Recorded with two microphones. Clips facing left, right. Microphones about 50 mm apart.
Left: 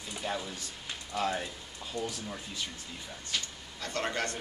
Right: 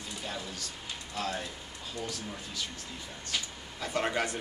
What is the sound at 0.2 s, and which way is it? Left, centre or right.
Speech, centre.